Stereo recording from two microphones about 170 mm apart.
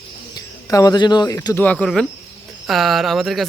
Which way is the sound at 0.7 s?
20° left (ahead or behind).